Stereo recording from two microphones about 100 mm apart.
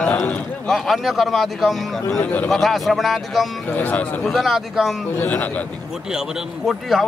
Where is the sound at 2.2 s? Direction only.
15° left (ahead or behind).